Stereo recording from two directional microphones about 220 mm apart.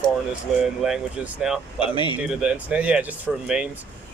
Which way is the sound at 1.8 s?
20° left (ahead or behind).